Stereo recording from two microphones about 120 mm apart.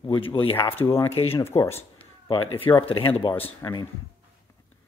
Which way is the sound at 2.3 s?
50° left (ahead or behind).